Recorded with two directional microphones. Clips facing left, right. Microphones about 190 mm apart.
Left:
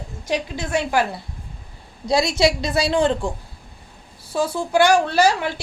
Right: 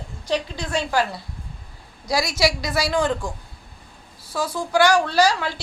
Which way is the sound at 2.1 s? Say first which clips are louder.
Left 4 dB; 25° left (ahead or behind).